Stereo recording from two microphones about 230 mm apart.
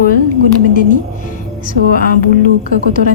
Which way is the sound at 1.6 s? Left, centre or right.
Left.